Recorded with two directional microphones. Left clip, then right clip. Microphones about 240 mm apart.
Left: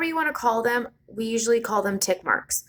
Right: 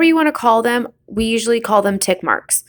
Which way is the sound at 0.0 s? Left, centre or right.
Right.